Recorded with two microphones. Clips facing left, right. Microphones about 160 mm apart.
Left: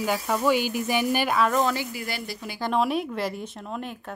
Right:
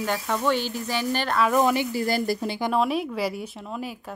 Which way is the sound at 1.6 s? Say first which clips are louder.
Right 3 dB; 20° right (ahead or behind).